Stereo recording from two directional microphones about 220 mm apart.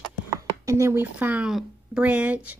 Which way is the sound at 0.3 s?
15° right (ahead or behind).